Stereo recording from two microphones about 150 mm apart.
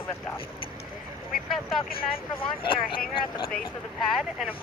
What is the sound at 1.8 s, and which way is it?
Speech, 75° left (ahead or behind).